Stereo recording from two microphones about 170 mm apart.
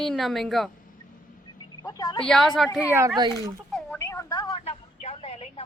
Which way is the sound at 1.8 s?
20° left (ahead or behind).